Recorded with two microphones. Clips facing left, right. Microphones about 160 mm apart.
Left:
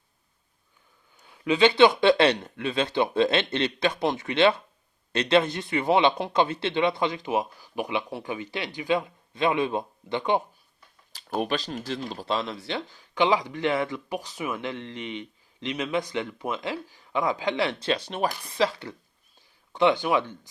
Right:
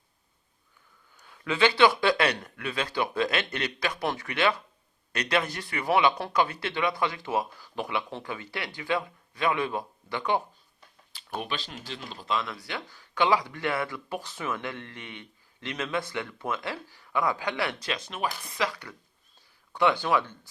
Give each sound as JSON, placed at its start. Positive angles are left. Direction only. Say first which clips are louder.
{"t": 1.1, "sound": "speech", "louder": "left 6 dB", "side_deg": 20}
{"t": 11.3, "sound": "speech", "louder": "left 7 dB", "side_deg": 40}